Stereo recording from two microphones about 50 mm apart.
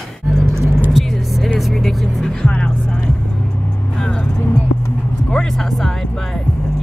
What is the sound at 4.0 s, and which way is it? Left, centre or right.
Music, left.